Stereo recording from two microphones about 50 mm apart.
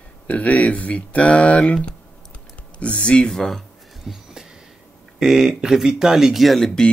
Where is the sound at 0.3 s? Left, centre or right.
Left.